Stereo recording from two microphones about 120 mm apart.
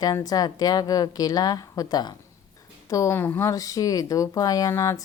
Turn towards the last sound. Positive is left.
turn(degrees=25)  # may be behind; listen again after turning